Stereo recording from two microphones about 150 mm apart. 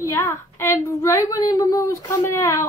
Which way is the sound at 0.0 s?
20° left (ahead or behind).